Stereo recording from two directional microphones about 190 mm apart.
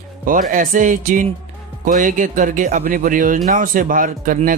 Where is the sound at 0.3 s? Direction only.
45° right (ahead or behind).